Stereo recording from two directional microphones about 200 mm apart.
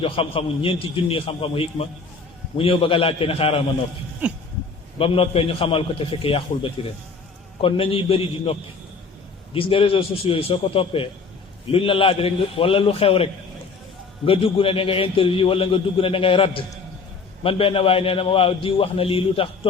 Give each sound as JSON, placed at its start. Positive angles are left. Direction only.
{"t": 0.0, "sound": "a man's voice", "side_deg": 25}
{"t": 4.2, "sound": "a sound", "side_deg": -10}
{"t": 4.9, "sound": "a man's voice", "side_deg": 30}
{"t": 9.6, "sound": "a man's voice", "side_deg": 25}